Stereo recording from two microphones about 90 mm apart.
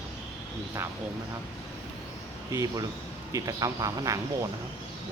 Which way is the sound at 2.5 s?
35° right (ahead or behind).